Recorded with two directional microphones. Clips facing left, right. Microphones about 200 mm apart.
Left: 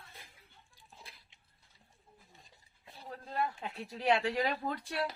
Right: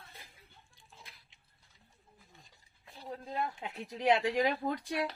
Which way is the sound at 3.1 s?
15° right (ahead or behind).